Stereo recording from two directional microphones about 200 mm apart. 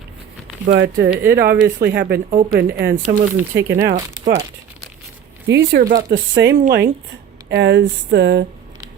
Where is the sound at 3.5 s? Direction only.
60° right (ahead or behind).